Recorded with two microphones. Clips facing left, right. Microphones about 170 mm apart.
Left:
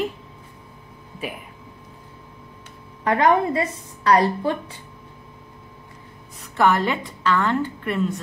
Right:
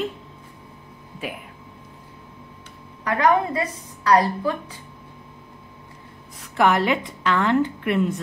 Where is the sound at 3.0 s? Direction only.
25° left (ahead or behind).